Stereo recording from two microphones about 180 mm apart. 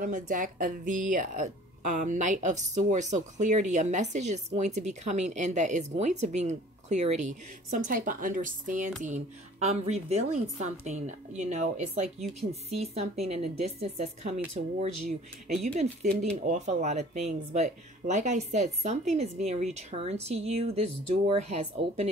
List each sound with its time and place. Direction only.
0.0 s speech: 45° right (ahead or behind)